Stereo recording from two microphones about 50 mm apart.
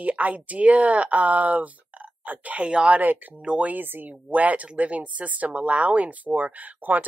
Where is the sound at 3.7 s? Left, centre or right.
Right.